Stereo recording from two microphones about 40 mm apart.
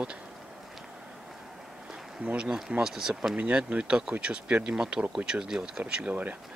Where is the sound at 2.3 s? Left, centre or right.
Right.